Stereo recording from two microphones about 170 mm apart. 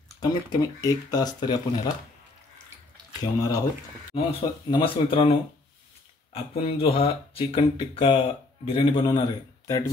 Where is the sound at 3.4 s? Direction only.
20° left (ahead or behind).